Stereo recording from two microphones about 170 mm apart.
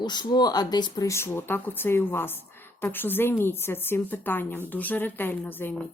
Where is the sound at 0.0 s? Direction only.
25° left (ahead or behind).